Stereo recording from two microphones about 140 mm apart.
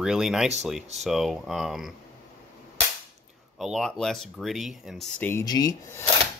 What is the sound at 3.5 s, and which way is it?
Speech, centre (ahead or behind).